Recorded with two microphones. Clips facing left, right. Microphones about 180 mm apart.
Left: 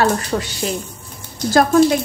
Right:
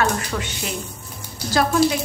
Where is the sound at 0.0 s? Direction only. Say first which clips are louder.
Left 5 dB; 35° left (ahead or behind).